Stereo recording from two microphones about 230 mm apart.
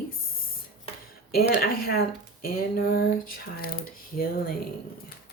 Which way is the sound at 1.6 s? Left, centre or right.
Left.